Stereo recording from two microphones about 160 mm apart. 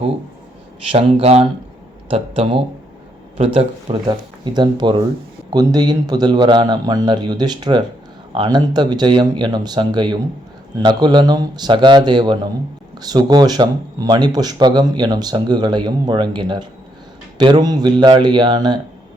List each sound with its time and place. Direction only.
0.9 s speech: 40° right (ahead or behind)